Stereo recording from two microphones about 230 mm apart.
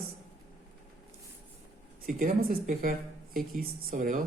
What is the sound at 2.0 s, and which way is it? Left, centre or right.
Speech, right.